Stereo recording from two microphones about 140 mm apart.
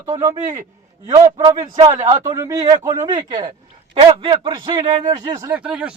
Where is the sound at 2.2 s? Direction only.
25° right (ahead or behind).